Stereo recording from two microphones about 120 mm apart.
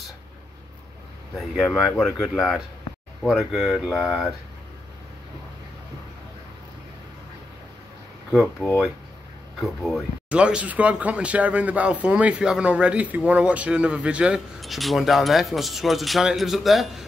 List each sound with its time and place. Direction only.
1.3 s speech: centre (ahead or behind)
9.6 s speech: centre (ahead or behind)